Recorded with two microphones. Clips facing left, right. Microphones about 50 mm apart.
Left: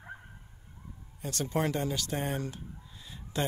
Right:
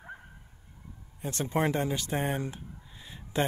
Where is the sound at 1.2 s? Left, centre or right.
Right.